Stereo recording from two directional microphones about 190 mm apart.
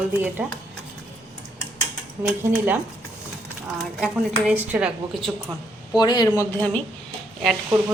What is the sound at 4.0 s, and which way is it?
A woman's voice, 5° right (ahead or behind).